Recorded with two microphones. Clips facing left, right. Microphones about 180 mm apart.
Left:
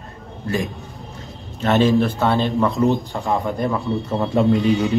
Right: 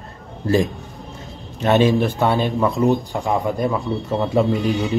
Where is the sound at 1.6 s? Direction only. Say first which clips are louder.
Even; 20° right (ahead or behind).